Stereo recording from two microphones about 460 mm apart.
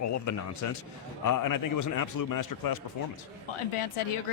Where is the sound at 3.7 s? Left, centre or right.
Left.